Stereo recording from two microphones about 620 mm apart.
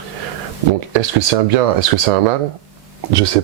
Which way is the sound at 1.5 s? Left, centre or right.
Right.